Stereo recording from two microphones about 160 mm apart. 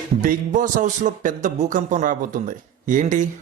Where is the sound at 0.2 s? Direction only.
55° right (ahead or behind).